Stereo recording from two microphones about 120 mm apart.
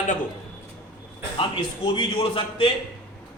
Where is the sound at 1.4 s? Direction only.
45° left (ahead or behind).